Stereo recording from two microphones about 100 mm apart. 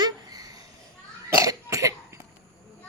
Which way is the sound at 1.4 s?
35° right (ahead or behind).